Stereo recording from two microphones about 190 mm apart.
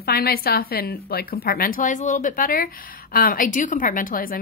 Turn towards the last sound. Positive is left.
turn(degrees=50)  # may be behind; listen again after turning